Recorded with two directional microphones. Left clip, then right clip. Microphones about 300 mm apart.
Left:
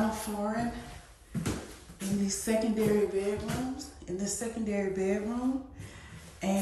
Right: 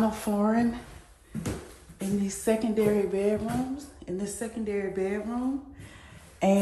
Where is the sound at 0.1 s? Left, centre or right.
Centre.